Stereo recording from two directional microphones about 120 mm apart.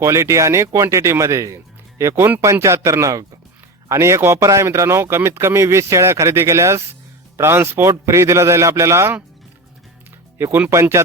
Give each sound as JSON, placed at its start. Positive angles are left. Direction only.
{"t": 0.0, "sound": "speech", "side_deg": -25}
{"t": 10.3, "sound": "speech", "side_deg": -20}